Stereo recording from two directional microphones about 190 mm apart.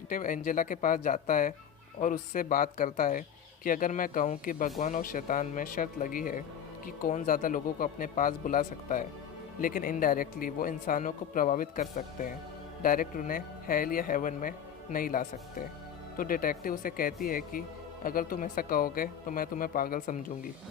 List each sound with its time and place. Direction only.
0.1 s a man's voice: 45° left (ahead or behind)